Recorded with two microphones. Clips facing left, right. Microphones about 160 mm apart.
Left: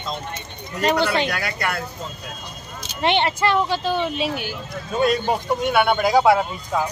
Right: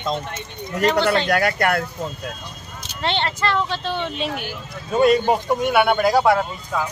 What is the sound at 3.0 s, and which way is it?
Speech, 15° left (ahead or behind).